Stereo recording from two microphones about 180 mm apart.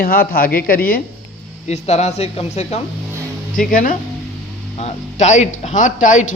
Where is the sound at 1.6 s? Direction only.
40° left (ahead or behind).